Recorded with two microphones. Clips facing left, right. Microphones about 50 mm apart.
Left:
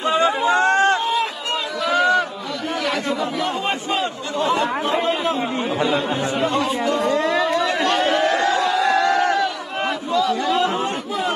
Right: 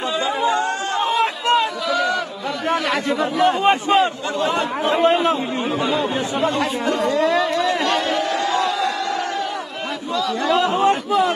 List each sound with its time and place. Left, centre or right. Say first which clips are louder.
0.5 s a sound: left 5 dB; left
2.7 s chatter: right 2 dB; right
3.2 s a man's voice: right 5 dB; right
6.6 s a man's voice: even; right
7.1 s speech: right 3 dB; left
7.6 s a sound: left 1 dB; left
10.8 s a man's voice: right 7 dB; right